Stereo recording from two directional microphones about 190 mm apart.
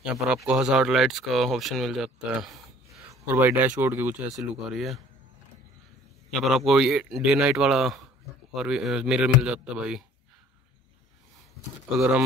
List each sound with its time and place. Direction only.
0.0 s speech: 5° right (ahead or behind)
3.1 s speech: 10° right (ahead or behind)
6.3 s speech: centre (ahead or behind)